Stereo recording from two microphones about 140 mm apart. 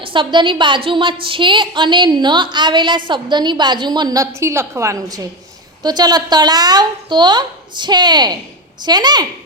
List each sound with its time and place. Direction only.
0.0 s a woman's voice: 35° right (ahead or behind)